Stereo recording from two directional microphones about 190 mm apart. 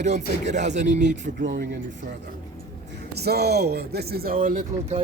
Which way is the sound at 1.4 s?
60° right (ahead or behind).